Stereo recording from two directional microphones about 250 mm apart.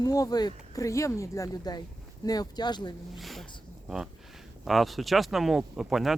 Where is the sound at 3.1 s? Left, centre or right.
Centre.